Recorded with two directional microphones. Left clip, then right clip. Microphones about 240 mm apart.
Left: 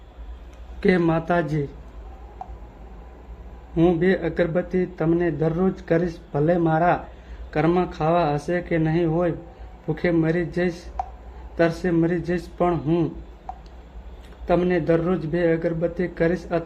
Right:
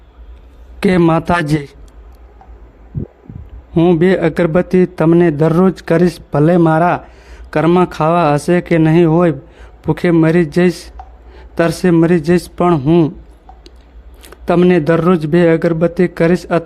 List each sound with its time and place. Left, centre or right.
0.8 s a man's voice: right
3.8 s a man's voice: right
14.4 s a man's voice: right